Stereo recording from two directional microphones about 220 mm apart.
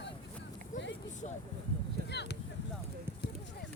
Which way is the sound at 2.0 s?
50° left (ahead or behind).